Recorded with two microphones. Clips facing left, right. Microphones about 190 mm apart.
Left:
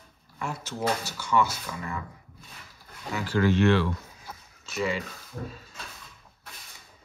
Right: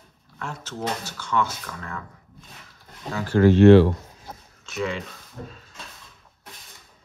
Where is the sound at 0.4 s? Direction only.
10° left (ahead or behind).